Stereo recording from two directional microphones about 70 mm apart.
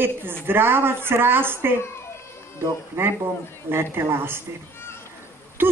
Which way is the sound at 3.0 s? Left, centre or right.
Right.